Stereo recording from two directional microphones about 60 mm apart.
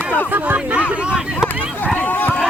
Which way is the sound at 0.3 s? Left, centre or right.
Right.